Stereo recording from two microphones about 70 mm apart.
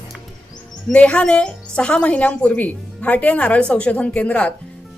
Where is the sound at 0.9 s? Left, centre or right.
Centre.